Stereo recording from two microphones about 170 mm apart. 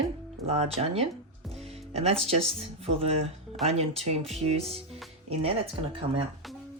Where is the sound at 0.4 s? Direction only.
40° right (ahead or behind).